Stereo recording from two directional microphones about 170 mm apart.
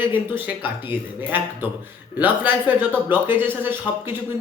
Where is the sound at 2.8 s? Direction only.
10° right (ahead or behind).